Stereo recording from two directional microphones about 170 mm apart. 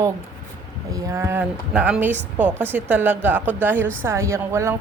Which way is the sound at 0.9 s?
15° right (ahead or behind).